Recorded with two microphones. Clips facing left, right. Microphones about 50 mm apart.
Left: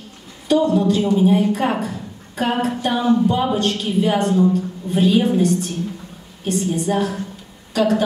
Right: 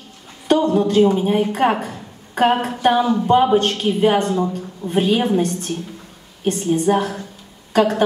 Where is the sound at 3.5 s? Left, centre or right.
Right.